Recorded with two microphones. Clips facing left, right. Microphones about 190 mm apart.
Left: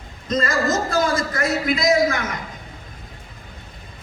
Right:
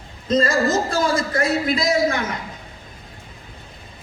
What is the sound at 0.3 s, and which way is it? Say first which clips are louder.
A man's voice: right 3 dB; 30° right (ahead or behind).